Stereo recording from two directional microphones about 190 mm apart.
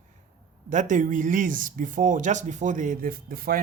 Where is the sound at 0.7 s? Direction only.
40° right (ahead or behind).